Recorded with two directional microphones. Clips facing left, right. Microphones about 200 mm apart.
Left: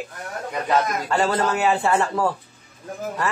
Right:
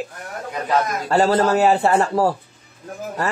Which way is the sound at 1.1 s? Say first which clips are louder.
Right 7 dB; 35° right (ahead or behind).